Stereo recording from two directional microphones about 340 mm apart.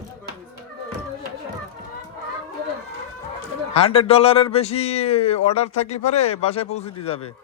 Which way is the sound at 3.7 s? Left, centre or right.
Centre.